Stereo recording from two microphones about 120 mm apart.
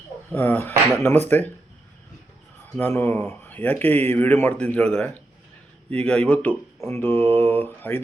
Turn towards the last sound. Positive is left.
turn(degrees=15)  # may be behind; listen again after turning